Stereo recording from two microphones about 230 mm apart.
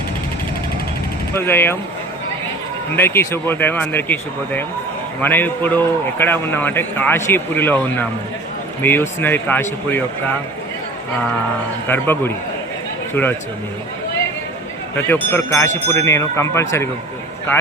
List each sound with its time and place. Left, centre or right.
1.3 s a man's voice: centre
2.9 s a man's voice: centre
11.9 s a man's voice: centre
14.9 s a man's voice: centre